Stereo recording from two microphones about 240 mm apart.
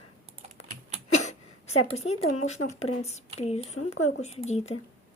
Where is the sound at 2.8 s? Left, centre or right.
Left.